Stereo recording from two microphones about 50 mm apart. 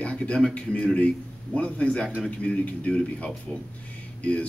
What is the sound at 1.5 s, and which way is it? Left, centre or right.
Speech, left.